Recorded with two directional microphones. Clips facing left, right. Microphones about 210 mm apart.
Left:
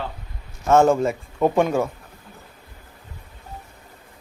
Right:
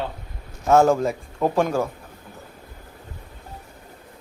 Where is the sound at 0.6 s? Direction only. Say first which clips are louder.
Left 1 dB; centre (ahead or behind).